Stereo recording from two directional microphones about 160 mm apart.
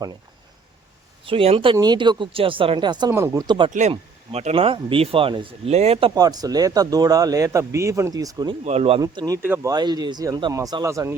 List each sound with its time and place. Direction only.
1.2 s speech: 35° right (ahead or behind)
3.7 s speech: 45° right (ahead or behind); by 8.5 s 25° right (ahead or behind)
8.6 s speech: 40° right (ahead or behind)
9.0 s speech: 25° right (ahead or behind)
9.4 s speech: 10° right (ahead or behind)
9.7 s speech: 25° right (ahead or behind)